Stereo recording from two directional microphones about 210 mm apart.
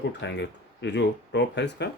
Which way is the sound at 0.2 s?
55° left (ahead or behind).